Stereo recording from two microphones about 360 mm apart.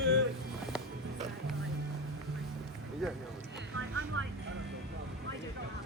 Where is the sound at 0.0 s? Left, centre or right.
Right.